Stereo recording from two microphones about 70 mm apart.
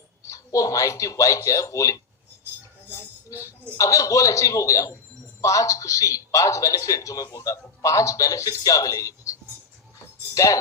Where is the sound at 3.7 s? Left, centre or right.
Left.